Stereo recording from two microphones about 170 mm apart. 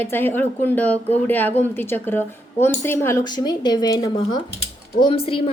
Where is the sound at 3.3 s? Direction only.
25° left (ahead or behind).